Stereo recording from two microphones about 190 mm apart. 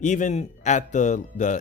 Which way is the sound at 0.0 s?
40° left (ahead or behind).